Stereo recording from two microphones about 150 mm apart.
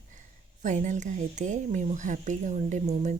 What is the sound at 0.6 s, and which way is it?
Speech, 55° right (ahead or behind).